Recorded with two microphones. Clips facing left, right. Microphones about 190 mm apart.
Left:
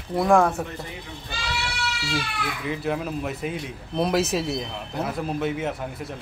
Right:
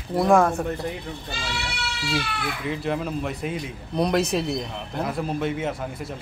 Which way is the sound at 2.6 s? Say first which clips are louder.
Even; centre (ahead or behind).